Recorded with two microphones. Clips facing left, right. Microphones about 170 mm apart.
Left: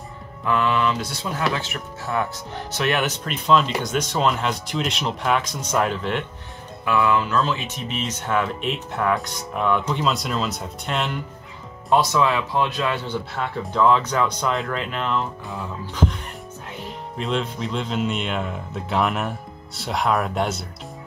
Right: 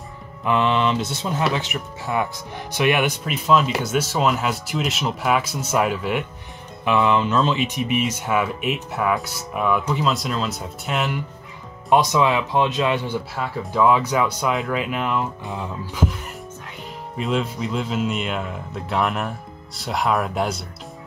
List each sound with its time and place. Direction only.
0.4 s speech: 20° right (ahead or behind)
6.8 s speech: 20° right (ahead or behind); by 11.1 s 5° right (ahead or behind)
11.9 s speech: 20° right (ahead or behind)
16.8 s speech: centre (ahead or behind)